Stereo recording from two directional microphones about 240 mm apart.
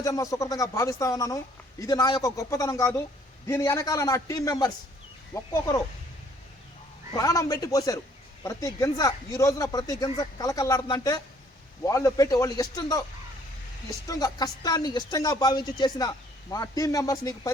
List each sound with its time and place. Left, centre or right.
0.0 s speech: centre
7.1 s speech: centre
14.1 s speech: centre